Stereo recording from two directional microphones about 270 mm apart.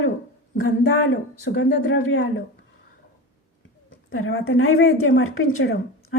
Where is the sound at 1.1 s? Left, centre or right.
Left.